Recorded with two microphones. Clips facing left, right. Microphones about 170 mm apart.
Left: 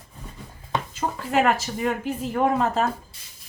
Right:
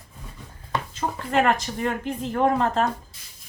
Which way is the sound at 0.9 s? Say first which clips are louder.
Even; 5° left (ahead or behind).